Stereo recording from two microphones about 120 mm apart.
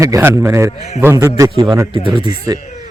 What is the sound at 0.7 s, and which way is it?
Speech, 65° left (ahead or behind).